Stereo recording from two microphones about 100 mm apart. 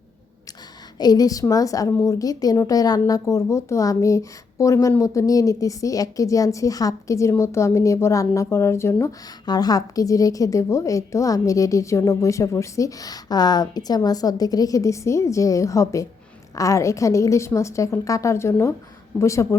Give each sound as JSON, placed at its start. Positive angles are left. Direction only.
{"t": 0.9, "sound": "speech", "side_deg": 40}
{"t": 9.5, "sound": "speech", "side_deg": 40}